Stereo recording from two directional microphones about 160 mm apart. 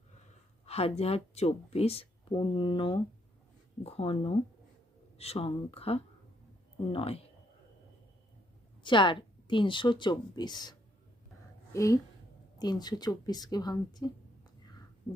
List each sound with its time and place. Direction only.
0.6 s speech: 40° left (ahead or behind)
8.8 s a woman's voice: 30° left (ahead or behind)